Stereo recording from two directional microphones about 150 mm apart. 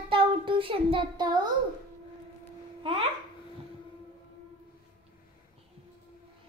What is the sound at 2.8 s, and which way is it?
Babbling, 40° right (ahead or behind).